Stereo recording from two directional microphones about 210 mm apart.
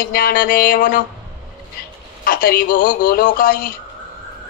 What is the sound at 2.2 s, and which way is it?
Speech, 45° left (ahead or behind).